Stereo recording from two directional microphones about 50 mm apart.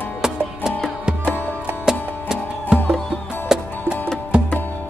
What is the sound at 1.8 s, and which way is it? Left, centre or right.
Music, centre.